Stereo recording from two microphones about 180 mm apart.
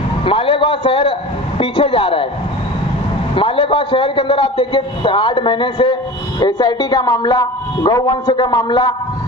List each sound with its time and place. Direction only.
0.2 s a man's voice: 30° left (ahead or behind)
3.3 s a man's voice: 30° left (ahead or behind)